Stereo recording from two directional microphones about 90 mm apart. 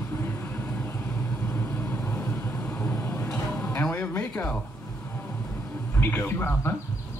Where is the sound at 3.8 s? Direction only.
25° left (ahead or behind).